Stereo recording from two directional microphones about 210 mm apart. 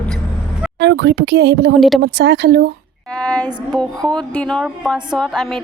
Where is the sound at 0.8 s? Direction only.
55° right (ahead or behind).